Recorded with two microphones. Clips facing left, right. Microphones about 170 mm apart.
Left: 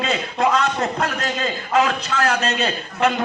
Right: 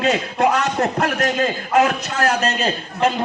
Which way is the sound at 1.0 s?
75° right (ahead or behind).